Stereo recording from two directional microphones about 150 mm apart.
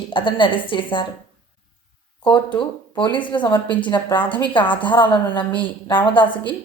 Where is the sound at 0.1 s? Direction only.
35° left (ahead or behind).